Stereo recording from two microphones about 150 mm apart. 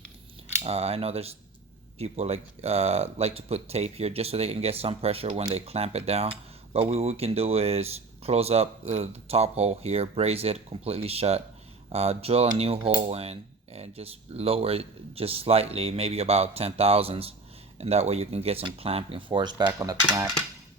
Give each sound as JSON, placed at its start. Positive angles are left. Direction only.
{"t": 0.6, "sound": "speech", "side_deg": -40}